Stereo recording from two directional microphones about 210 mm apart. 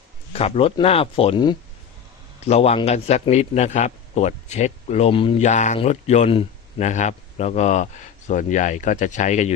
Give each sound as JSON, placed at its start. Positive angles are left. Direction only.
{"t": 0.3, "sound": "a man's voice", "side_deg": 30}